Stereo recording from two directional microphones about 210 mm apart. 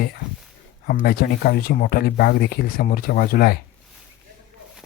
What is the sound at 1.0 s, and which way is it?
Speech, 45° left (ahead or behind).